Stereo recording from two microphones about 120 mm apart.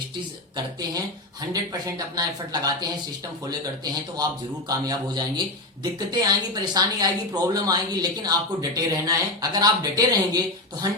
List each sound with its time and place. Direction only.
0.5 s speech: 35° right (ahead or behind)
4.9 s speech: 35° right (ahead or behind)